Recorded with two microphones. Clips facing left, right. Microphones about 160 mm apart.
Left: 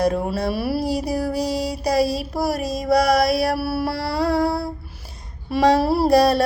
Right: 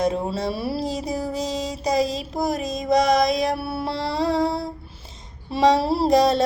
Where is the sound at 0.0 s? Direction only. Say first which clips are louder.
Left 2 dB; 20° right (ahead or behind).